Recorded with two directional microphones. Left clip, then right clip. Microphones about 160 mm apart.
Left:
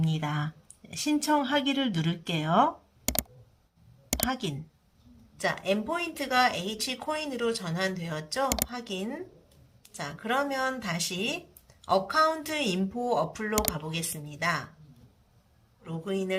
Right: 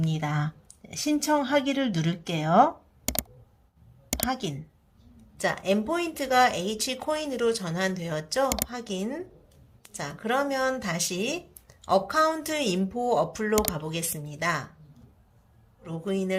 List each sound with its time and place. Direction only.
0.0 s a woman's voice: 20° right (ahead or behind)
3.1 s a sound: centre (ahead or behind)
4.3 s a woman's voice: 20° right (ahead or behind)
5.4 s speech: 35° right (ahead or behind)
8.4 s speech: centre (ahead or behind)
8.7 s speech: 35° right (ahead or behind)
15.8 s a woman's voice: 30° right (ahead or behind)